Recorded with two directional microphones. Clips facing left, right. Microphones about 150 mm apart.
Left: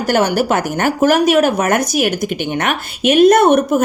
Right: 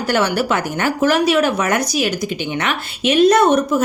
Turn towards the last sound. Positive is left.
turn(degrees=55)  # may be behind; listen again after turning